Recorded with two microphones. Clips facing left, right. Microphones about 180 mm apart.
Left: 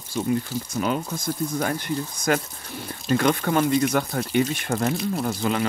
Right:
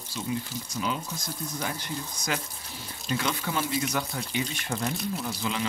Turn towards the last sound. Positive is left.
turn(degrees=50)  # may be behind; listen again after turning